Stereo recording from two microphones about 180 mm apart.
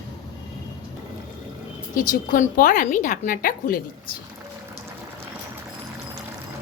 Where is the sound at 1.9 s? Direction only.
50° left (ahead or behind).